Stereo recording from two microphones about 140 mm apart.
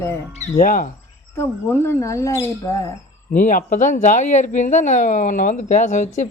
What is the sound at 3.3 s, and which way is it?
Speech, 70° left (ahead or behind).